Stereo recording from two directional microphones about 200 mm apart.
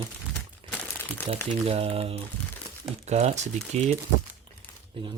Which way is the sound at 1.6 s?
30° right (ahead or behind).